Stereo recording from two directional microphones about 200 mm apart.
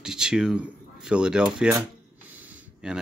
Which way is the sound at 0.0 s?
5° right (ahead or behind).